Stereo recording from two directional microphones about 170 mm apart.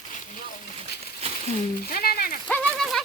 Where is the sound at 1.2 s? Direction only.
35° right (ahead or behind).